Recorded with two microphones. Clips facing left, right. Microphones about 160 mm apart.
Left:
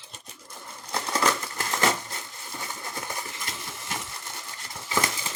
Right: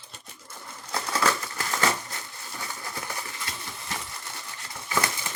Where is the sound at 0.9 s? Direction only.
20° left (ahead or behind).